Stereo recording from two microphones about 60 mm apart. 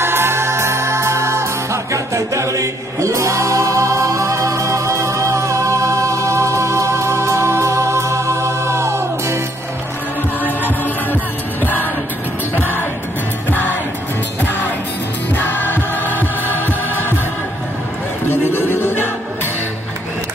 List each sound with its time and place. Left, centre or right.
0.0 s music: right
11.6 s music: left
15.3 s music: left
18.7 s music: left